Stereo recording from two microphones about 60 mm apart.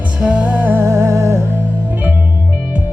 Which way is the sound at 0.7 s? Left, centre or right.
Right.